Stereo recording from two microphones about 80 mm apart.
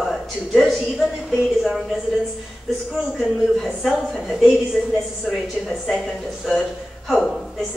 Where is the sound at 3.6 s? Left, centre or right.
Centre.